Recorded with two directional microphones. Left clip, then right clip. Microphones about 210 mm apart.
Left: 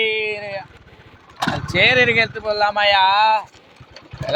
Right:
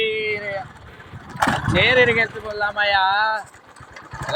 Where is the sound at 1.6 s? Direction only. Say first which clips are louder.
Left 2 dB; 35° left (ahead or behind); by 3.4 s 20° left (ahead or behind).